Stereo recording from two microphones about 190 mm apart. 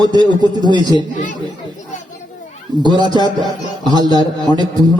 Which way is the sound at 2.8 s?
20° right (ahead or behind).